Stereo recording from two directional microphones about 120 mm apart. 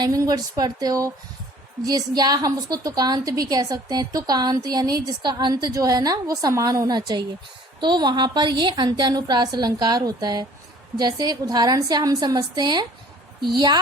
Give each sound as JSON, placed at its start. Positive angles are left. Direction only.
{"t": 0.0, "sound": "a woman's voice", "side_deg": -30}